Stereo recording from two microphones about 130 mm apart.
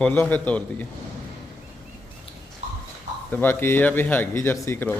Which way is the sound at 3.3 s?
15° left (ahead or behind).